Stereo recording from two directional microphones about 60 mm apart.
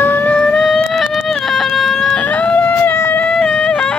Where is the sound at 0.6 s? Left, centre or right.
Centre.